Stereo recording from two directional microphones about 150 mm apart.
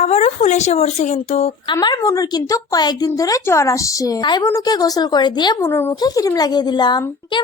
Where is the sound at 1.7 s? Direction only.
25° left (ahead or behind).